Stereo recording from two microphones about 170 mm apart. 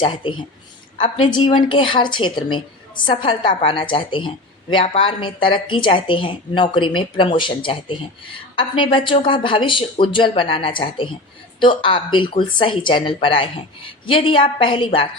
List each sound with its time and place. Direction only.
0.0 s speech: 30° left (ahead or behind)